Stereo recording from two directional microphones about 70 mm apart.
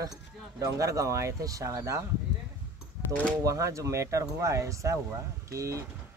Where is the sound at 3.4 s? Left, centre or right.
Right.